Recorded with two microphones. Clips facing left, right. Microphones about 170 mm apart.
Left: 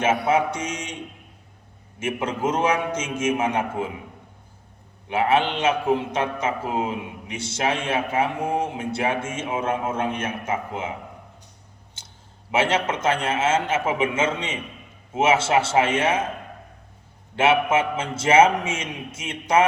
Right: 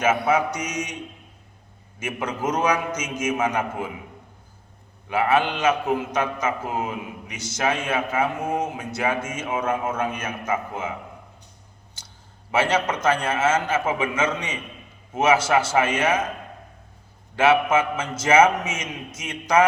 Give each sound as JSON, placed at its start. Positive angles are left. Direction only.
{"t": 0.0, "sound": "a man's voice", "side_deg": 30}
{"t": 2.0, "sound": "a man's voice", "side_deg": 25}
{"t": 5.0, "sound": "a man's voice", "side_deg": 25}
{"t": 12.5, "sound": "a man's voice", "side_deg": 25}
{"t": 17.3, "sound": "a man's voice", "side_deg": 25}